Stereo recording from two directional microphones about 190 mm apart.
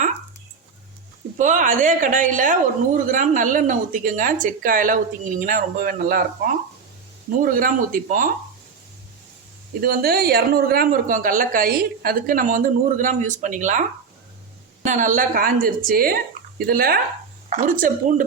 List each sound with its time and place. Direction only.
1.4 s speech: 40° right (ahead or behind)
7.4 s speech: 50° right (ahead or behind)
9.8 s speech: 55° right (ahead or behind)
14.8 s speech: 40° right (ahead or behind)